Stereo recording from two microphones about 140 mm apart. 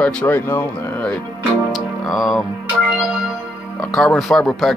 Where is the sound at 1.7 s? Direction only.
Centre (ahead or behind).